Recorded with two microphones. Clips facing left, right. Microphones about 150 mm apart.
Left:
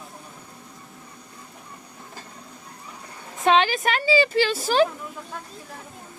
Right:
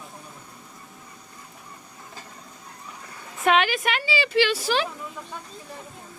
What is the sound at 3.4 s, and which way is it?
Speech, 30° left (ahead or behind).